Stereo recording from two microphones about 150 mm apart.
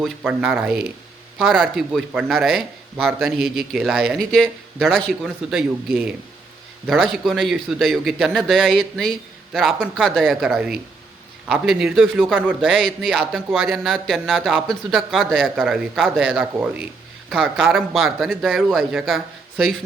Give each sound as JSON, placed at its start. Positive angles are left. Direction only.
{"t": 0.0, "sound": "a man's voice", "side_deg": -5}